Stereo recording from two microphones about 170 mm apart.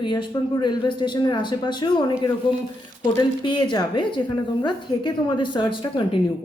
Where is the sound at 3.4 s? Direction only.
25° left (ahead or behind).